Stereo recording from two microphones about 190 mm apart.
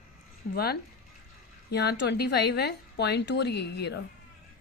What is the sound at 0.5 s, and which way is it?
A woman's voice, 55° left (ahead or behind).